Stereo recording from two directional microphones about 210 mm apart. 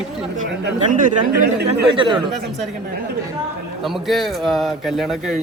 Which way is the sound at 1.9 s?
25° right (ahead or behind).